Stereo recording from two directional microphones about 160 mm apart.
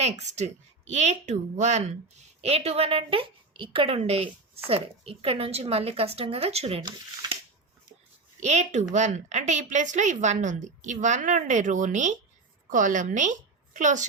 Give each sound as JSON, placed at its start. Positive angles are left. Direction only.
{"t": 0.0, "sound": "a woman's voice", "side_deg": -45}
{"t": 6.8, "sound": "speech", "side_deg": -30}
{"t": 8.4, "sound": "a woman's voice", "side_deg": -45}